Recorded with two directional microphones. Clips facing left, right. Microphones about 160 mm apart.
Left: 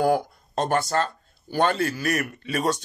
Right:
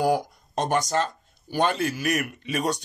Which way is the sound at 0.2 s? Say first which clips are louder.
Left 1 dB; 15° right (ahead or behind).